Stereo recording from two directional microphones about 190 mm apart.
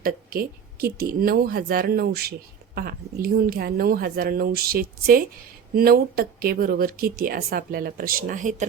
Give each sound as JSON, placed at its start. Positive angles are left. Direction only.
{"t": 0.0, "sound": "speech", "side_deg": -50}